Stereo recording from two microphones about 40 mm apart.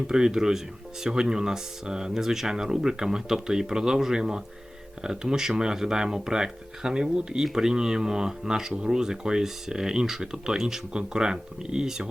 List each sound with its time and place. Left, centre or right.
0.1 s speech: centre